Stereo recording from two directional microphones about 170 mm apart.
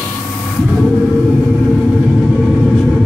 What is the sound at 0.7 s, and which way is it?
Vehicle, 5° left (ahead or behind).